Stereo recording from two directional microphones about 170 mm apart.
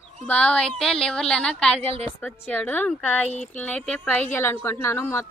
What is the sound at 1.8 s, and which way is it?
Speech, 35° right (ahead or behind).